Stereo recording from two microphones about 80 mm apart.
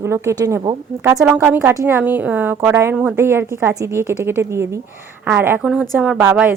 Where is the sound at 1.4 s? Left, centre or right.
Right.